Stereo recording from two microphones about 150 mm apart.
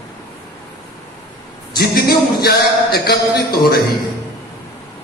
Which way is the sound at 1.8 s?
90° left.